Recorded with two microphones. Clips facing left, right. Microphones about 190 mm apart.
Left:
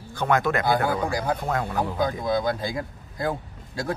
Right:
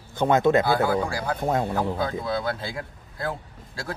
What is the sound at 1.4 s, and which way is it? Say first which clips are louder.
Speech: right 3 dB; 25° right (ahead or behind).